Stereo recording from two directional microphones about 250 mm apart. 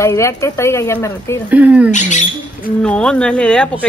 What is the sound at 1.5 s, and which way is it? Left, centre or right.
Speech, centre.